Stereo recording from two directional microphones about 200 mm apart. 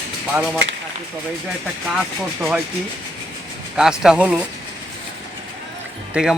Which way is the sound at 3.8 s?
5° right (ahead or behind).